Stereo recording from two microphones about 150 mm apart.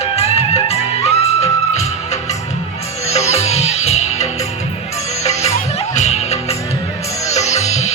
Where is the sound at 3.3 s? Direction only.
45° left (ahead or behind).